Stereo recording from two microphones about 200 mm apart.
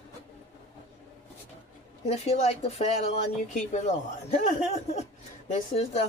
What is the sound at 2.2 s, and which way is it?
Speech, 30° left (ahead or behind).